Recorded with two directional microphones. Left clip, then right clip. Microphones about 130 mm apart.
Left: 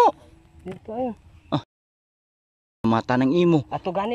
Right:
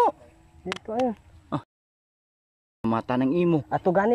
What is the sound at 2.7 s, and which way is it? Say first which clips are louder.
Speech: left 4 dB; 5° right (ahead or behind).